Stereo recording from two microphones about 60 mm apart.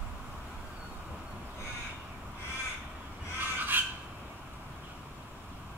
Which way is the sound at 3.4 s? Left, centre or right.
Right.